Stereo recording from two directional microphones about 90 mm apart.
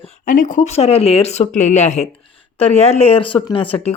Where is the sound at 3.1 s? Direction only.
75° left (ahead or behind).